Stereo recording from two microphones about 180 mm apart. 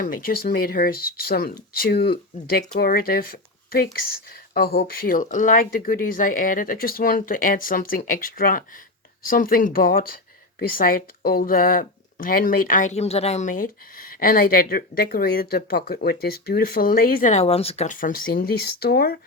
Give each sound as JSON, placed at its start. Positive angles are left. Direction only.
{"t": 0.0, "sound": "speech", "side_deg": 50}
{"t": 17.9, "sound": "speech", "side_deg": 50}